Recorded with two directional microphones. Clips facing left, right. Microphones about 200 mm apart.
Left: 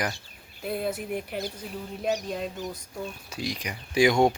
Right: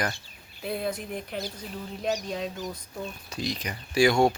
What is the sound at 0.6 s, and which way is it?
Speech, centre (ahead or behind).